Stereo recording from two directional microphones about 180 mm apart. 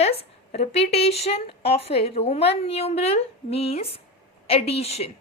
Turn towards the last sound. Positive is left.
turn(degrees=35)  # may be behind; listen again after turning